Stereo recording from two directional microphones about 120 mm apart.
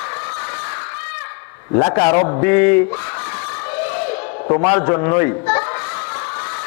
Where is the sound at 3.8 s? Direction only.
15° left (ahead or behind).